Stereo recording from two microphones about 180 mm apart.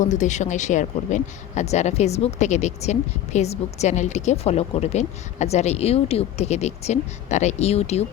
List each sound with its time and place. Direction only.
0.0 s speech: 40° left (ahead or behind)